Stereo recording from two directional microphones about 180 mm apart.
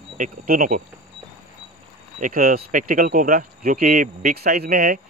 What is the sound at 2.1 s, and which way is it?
Speech, 50° right (ahead or behind).